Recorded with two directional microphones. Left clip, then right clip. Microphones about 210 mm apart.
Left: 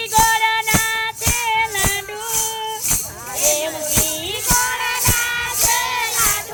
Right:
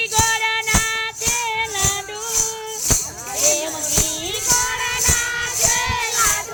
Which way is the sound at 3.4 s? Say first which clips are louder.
Left 1 dB; 10° right (ahead or behind).